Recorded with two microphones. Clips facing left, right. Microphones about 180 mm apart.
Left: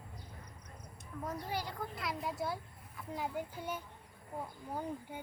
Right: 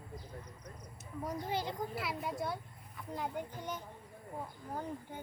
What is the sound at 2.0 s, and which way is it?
A child's voice, centre (ahead or behind).